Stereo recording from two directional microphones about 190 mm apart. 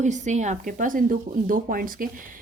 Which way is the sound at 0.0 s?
40° right (ahead or behind).